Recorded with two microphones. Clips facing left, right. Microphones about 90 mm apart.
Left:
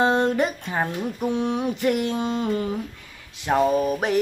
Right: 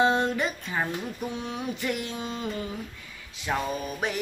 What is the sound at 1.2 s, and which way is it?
Mantra, 65° left (ahead or behind).